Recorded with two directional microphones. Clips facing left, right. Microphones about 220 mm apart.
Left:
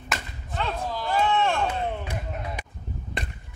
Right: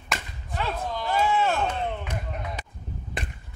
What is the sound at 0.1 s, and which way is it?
Whip, centre (ahead or behind).